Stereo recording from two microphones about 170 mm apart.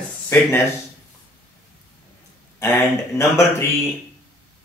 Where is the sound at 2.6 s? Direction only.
15° left (ahead or behind).